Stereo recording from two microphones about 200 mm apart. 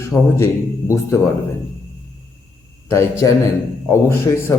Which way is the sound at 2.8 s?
15° left (ahead or behind).